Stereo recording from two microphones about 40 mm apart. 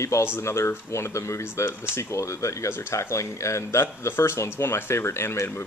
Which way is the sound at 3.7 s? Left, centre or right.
Left.